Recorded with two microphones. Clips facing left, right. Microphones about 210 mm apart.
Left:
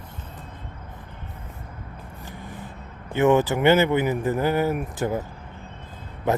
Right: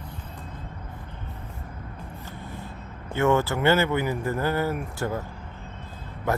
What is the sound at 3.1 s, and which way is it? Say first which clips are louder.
Speech: left 4 dB; 15° left (ahead or behind).